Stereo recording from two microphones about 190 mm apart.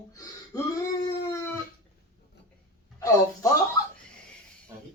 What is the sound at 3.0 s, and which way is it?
Speech, 15° left (ahead or behind).